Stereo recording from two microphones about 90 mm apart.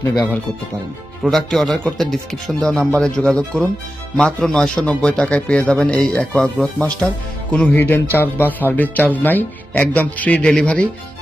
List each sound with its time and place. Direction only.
1.2 s a man's voice: 5° left (ahead or behind)